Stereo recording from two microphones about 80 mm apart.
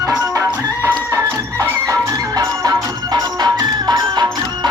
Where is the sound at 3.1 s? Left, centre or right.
Right.